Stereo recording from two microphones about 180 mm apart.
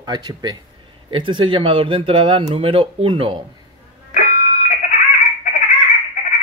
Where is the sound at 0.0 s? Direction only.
25° right (ahead or behind).